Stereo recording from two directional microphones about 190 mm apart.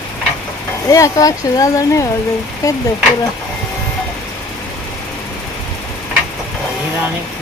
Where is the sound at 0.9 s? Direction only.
20° left (ahead or behind).